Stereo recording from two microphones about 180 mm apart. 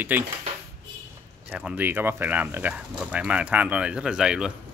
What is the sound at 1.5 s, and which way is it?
Speech, 5° right (ahead or behind).